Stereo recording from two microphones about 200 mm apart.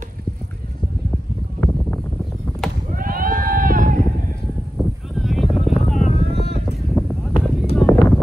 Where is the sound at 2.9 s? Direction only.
45° right (ahead or behind).